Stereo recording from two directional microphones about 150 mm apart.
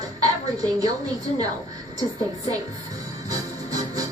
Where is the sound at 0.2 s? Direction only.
25° right (ahead or behind).